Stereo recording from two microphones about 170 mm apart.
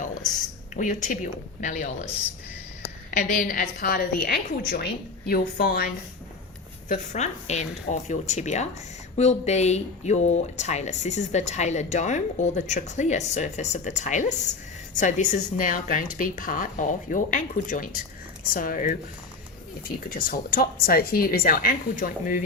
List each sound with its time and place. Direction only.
0.8 s speech: 50° left (ahead or behind)
3.1 s a woman's voice: 50° left (ahead or behind)
6.8 s speech: 50° left (ahead or behind)
20.2 s a woman's voice: 60° left (ahead or behind)